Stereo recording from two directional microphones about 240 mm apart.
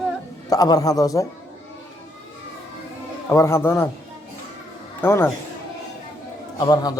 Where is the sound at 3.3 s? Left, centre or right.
Centre.